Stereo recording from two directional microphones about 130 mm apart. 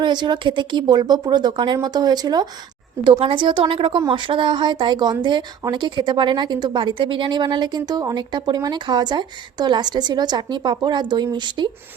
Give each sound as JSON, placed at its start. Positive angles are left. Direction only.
{"t": 0.0, "sound": "a woman's voice", "side_deg": -35}